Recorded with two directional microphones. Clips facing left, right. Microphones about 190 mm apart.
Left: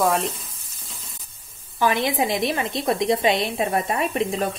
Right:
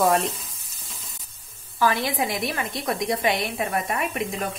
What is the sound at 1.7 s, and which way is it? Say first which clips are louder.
A woman's voice: left 2 dB; 20° left (ahead or behind).